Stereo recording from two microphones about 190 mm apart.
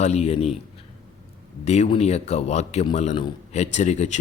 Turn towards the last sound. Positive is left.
turn(degrees=35)  # may be behind; listen again after turning